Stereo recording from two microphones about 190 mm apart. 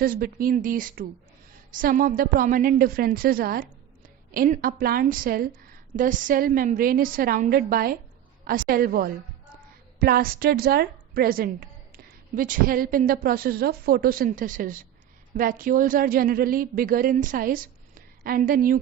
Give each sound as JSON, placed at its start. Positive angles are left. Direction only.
{"t": 0.0, "sound": "a woman's voice", "side_deg": -50}